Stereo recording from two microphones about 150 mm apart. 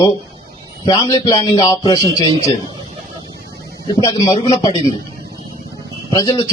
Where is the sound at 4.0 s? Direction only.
20° left (ahead or behind).